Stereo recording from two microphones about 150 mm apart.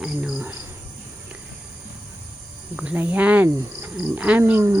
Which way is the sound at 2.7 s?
10° right (ahead or behind).